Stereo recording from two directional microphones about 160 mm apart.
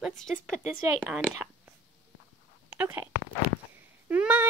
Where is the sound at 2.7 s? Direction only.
15° right (ahead or behind).